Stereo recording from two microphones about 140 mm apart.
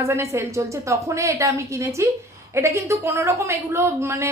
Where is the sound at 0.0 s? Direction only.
20° right (ahead or behind).